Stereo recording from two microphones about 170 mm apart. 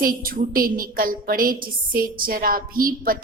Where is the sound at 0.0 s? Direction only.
60° right (ahead or behind).